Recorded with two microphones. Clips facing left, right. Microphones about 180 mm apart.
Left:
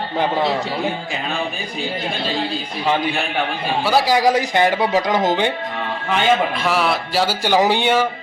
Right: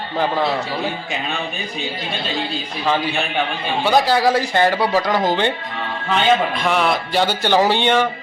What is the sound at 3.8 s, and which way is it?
Speech, 5° left (ahead or behind).